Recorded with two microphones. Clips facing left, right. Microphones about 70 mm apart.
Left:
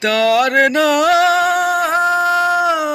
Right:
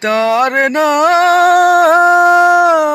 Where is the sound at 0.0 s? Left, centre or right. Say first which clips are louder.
Right 2 dB; right.